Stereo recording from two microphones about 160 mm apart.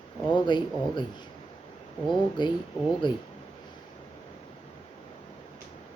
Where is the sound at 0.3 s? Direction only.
30° left (ahead or behind).